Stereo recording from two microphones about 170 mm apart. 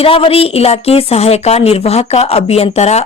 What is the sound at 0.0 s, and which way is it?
Speech, 35° left (ahead or behind).